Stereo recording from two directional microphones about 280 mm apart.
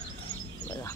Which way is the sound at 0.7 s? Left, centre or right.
Centre.